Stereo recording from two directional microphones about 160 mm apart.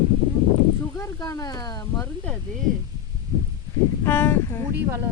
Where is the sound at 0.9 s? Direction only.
20° left (ahead or behind).